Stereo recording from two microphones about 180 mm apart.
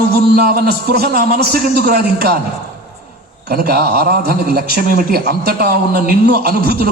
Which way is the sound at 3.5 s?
60° right (ahead or behind).